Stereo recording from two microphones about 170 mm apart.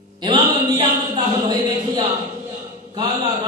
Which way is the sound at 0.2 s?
25° right (ahead or behind).